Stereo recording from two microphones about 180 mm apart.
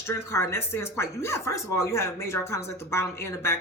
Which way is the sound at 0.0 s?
15° left (ahead or behind).